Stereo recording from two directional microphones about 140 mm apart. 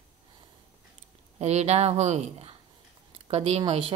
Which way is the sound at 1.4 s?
50° right (ahead or behind).